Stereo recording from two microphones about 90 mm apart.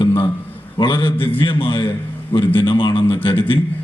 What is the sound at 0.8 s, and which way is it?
A man's voice, 65° left (ahead or behind).